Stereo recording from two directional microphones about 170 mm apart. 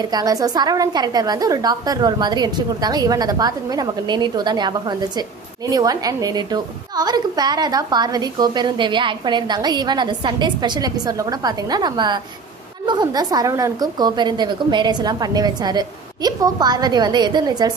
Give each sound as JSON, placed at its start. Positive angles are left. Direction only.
{"t": 0.1, "sound": "a woman's voice", "side_deg": -20}